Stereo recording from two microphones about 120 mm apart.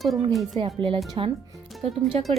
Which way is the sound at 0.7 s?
45° right (ahead or behind).